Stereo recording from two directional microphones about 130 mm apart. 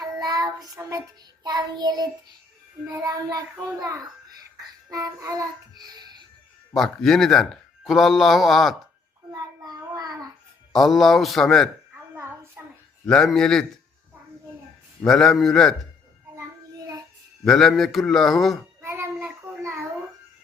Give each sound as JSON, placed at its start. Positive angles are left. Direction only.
{"t": 0.0, "sound": "child singing", "side_deg": -30}
{"t": 3.1, "sound": "a child's voice", "side_deg": -30}
{"t": 4.5, "sound": "child singing", "side_deg": -25}
{"t": 6.7, "sound": "speech", "side_deg": 0}
{"t": 9.3, "sound": "child singing", "side_deg": -30}
{"t": 10.7, "sound": "speech", "side_deg": 0}
{"t": 12.1, "sound": "a sound", "side_deg": -15}
{"t": 13.1, "sound": "speech", "side_deg": 5}
{"t": 15.0, "sound": "speech", "side_deg": 5}
{"t": 16.3, "sound": "child singing", "side_deg": -25}
{"t": 17.4, "sound": "speech", "side_deg": 5}
{"t": 18.8, "sound": "child singing", "side_deg": -20}